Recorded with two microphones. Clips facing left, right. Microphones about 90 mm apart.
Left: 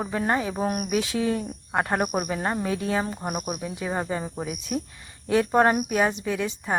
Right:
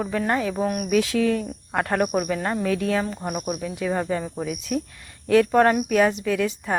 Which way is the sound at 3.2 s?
5° left (ahead or behind).